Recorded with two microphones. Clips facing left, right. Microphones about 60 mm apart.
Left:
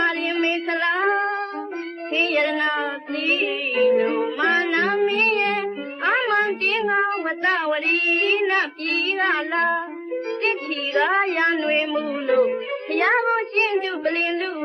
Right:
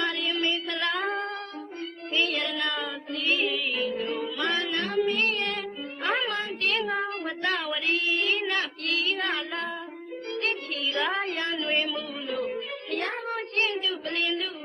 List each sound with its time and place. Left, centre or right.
0.0 s a sound: left
2.1 s child singing: left
3.2 s music: left
6.7 s meow: left
7.0 s child singing: left
10.9 s a sound: left
12.3 s speech: left
12.9 s music: left
13.3 s child singing: left